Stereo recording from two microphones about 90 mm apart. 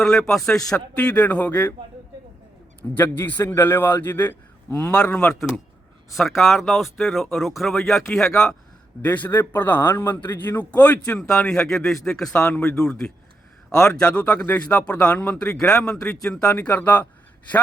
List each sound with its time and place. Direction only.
0.0 s speech: 5° left (ahead or behind)
2.9 s a man's voice: 20° left (ahead or behind)
4.9 s speech: 15° left (ahead or behind)
9.0 s a man's voice: 20° left (ahead or behind); by 12.3 s 5° left (ahead or behind)
12.3 s speech: 15° left (ahead or behind)
16.5 s a man's voice: 20° left (ahead or behind)